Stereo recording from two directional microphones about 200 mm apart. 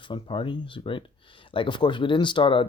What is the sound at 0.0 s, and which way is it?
Speech, 25° left (ahead or behind).